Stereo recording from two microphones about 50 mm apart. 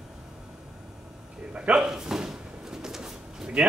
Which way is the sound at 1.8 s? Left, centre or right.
Centre.